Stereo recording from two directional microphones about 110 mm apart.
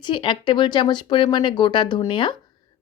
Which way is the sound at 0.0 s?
50° left (ahead or behind).